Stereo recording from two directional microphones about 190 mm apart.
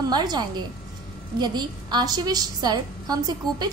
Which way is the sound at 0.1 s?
20° right (ahead or behind).